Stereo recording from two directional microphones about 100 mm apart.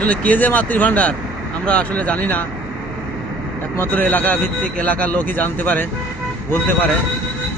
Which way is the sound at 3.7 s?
20° left (ahead or behind).